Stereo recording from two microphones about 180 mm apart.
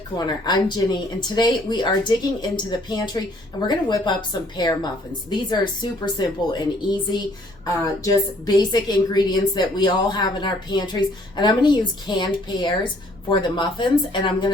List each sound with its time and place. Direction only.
0.2 s a woman's voice: 20° left (ahead or behind)